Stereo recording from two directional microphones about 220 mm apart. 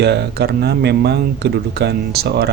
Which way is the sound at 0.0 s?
50° right (ahead or behind).